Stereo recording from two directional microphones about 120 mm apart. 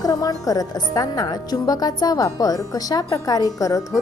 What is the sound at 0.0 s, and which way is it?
A woman's voice, 30° left (ahead or behind).